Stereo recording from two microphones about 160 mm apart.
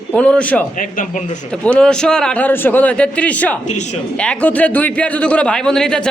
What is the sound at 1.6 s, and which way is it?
A man's voice, 5° left (ahead or behind).